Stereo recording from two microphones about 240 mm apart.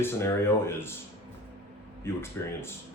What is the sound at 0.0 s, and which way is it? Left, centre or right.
Speech, centre.